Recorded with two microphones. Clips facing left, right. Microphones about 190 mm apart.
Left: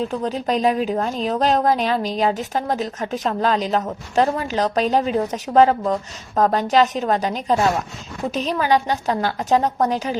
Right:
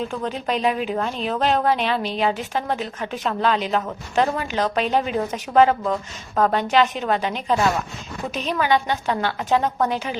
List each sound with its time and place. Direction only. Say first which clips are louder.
0.0 s a woman's voice: left 3 dB; 35° left (ahead or behind)